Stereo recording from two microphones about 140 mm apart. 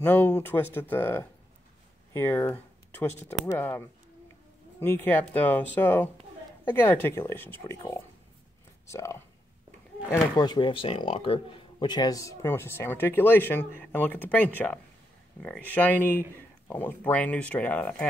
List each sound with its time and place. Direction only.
0.0 s speech: 15° left (ahead or behind)
10.3 s speech: 30° left (ahead or behind); by 18.0 s 10° left (ahead or behind)